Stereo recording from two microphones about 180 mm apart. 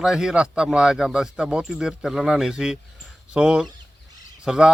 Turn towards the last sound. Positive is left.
turn(degrees=-5)  # may be behind; listen again after turning